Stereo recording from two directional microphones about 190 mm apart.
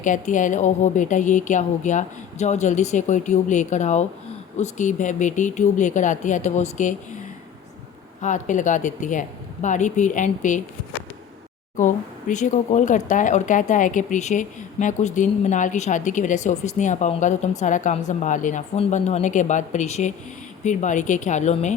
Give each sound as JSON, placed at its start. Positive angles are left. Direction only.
{"t": 0.0, "sound": "speech", "side_deg": 40}
{"t": 11.8, "sound": "speech", "side_deg": 40}